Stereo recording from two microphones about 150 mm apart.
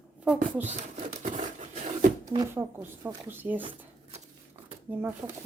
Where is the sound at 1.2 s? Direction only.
55° right (ahead or behind).